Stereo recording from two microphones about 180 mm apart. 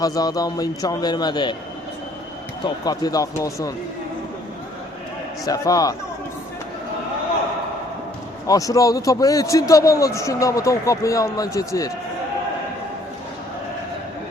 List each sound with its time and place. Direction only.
0.0 s a man's voice: 20° left (ahead or behind)
2.6 s a man's voice: 20° left (ahead or behind)
5.5 s a man's voice: 20° left (ahead or behind)
8.4 s a man's voice: 20° left (ahead or behind)